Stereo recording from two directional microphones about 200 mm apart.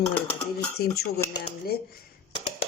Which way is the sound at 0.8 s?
50° left (ahead or behind).